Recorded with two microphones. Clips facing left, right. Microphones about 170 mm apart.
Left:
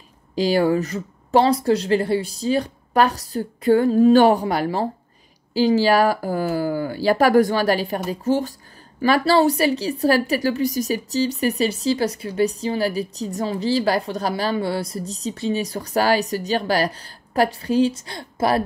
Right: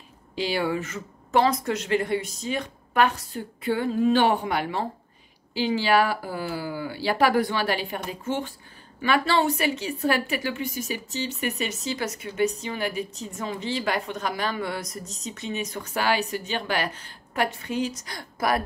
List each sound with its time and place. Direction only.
0.4 s a woman's voice: 40° left (ahead or behind)